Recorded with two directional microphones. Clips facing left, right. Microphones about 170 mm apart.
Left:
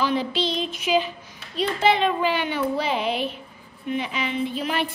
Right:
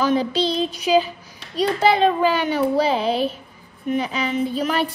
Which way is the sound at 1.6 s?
40° right (ahead or behind).